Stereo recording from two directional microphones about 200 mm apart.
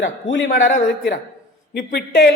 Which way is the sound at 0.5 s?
35° left (ahead or behind).